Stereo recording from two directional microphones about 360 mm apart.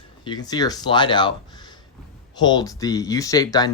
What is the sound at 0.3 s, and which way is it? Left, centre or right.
Speech, centre.